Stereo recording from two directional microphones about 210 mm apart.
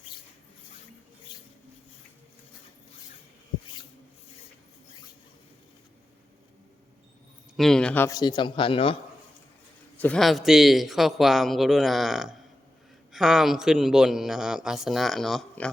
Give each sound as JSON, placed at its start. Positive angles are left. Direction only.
{"t": 1.3, "sound": "a sound", "side_deg": 20}
{"t": 7.5, "sound": "a man's voice", "side_deg": 0}
{"t": 10.0, "sound": "a man's voice", "side_deg": 5}